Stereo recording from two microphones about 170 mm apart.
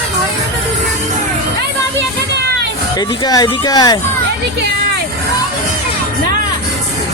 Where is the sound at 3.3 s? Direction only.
25° left (ahead or behind).